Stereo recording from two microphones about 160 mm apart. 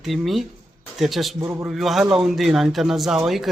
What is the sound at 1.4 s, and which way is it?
Speech, 15° right (ahead or behind).